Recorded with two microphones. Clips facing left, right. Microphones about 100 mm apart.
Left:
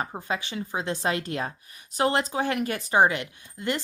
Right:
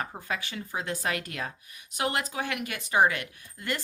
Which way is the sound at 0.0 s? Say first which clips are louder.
Left 3 dB; 25° left (ahead or behind).